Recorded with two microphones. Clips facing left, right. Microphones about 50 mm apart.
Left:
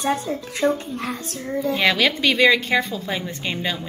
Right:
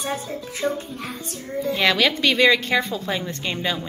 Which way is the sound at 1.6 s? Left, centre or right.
Centre.